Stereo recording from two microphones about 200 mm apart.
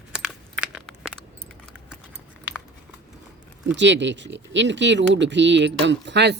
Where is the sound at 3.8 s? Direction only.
65° right (ahead or behind).